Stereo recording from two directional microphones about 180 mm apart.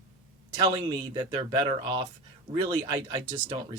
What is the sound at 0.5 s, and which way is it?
Speech, 25° right (ahead or behind).